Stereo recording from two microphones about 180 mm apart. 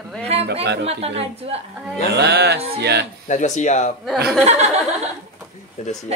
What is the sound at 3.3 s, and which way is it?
Speech, 40° left (ahead or behind).